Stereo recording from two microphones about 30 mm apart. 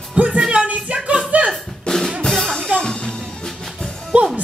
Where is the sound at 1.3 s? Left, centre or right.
Right.